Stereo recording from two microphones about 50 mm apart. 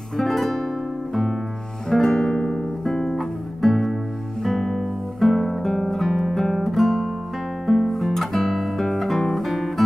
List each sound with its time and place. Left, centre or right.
0.2 s music: centre
1.9 s music: centre
2.2 s guitar: centre
2.8 s music: centre
4.4 s guitar: centre